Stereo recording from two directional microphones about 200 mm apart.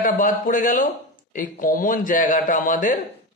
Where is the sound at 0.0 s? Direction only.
40° left (ahead or behind).